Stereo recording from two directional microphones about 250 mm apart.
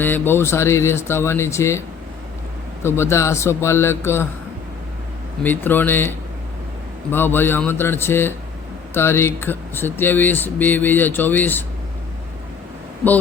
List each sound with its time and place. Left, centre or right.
0.0 s speech: centre
2.8 s speech: centre
5.4 s speech: centre